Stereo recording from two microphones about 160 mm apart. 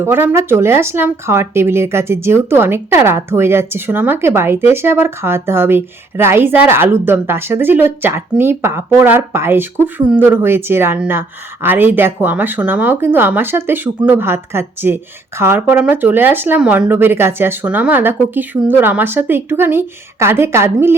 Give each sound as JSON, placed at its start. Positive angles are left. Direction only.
{"t": 0.0, "sound": "speech", "side_deg": -15}